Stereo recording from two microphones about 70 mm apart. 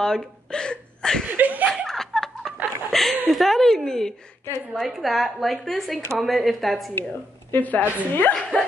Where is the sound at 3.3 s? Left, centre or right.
Centre.